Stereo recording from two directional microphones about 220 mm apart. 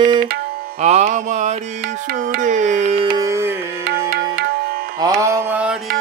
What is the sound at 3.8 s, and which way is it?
Music, 45° right (ahead or behind).